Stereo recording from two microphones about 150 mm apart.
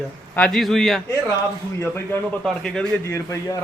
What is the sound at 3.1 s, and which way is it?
Speech, 20° left (ahead or behind).